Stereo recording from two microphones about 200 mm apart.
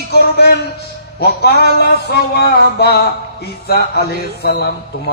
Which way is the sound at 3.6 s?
50° left (ahead or behind).